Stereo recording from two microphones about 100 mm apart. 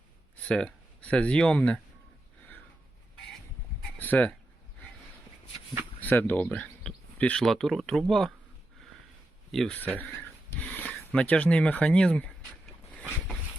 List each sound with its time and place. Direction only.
0.3 s speech: 10° left (ahead or behind)
3.9 s speech: 15° left (ahead or behind)
6.0 s speech: 15° left (ahead or behind)
9.5 s speech: 5° left (ahead or behind)
10.2 s a sound: 15° left (ahead or behind)